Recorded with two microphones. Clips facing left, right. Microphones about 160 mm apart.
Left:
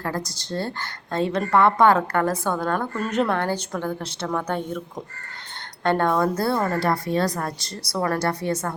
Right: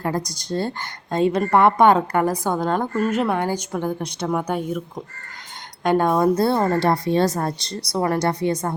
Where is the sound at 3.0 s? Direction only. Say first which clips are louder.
Right 1 dB; 5° right (ahead or behind).